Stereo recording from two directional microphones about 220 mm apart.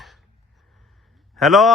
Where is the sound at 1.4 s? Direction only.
Centre (ahead or behind).